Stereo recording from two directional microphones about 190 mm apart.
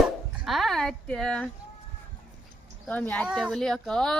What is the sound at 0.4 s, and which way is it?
Speech, centre (ahead or behind).